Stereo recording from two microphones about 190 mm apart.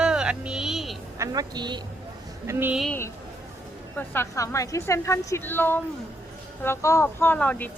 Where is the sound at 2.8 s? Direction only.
10° left (ahead or behind).